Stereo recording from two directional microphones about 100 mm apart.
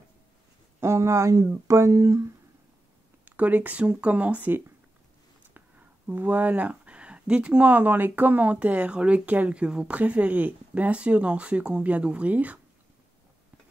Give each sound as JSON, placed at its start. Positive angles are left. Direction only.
{"t": 0.7, "sound": "speech", "side_deg": -25}
{"t": 1.7, "sound": "a sound", "side_deg": -30}
{"t": 3.3, "sound": "speech", "side_deg": -15}